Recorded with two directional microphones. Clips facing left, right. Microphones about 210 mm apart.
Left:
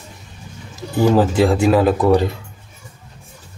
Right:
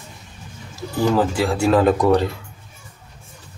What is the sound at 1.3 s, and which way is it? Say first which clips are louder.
Speech: left 5 dB; 20° left (ahead or behind).